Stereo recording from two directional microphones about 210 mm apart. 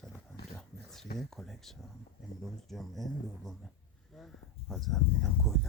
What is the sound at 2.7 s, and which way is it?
Speech, centre (ahead or behind).